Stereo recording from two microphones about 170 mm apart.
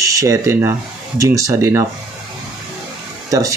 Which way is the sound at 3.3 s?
20° right (ahead or behind).